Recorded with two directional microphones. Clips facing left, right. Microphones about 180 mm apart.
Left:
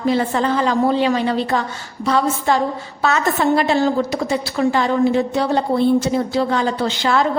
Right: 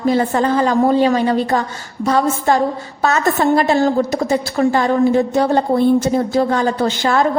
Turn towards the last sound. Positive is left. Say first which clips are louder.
# right 2 dB
turn(degrees=-50)  # may be behind; listen again after turning